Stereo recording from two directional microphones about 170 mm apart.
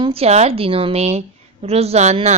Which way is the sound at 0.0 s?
35° right (ahead or behind).